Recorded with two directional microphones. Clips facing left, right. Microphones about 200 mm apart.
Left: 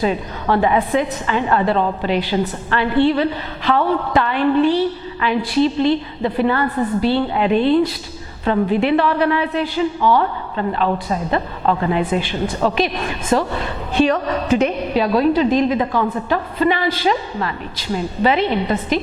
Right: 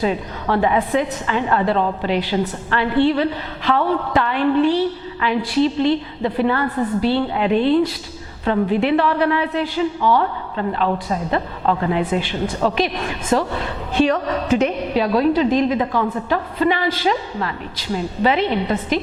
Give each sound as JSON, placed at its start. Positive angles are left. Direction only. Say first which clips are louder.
{"t": 0.0, "sound": "a woman's voice", "louder": "left 1 dB", "side_deg": 15}